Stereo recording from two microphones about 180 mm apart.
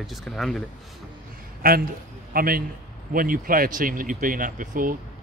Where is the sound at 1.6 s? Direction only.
55° right (ahead or behind).